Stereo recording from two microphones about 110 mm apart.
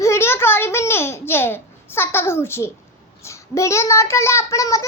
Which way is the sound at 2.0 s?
20° left (ahead or behind).